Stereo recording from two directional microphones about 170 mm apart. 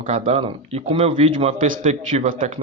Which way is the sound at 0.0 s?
45° right (ahead or behind).